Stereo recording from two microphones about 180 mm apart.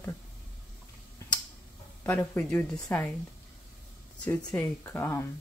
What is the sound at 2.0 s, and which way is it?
Speech, 10° left (ahead or behind).